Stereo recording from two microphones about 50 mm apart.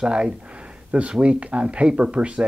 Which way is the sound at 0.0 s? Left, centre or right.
Centre.